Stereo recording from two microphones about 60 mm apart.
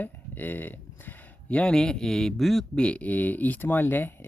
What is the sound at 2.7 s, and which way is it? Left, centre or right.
Speech, centre.